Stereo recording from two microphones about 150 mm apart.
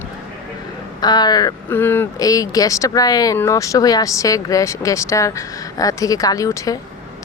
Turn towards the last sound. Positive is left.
turn(degrees=20)  # may be behind; listen again after turning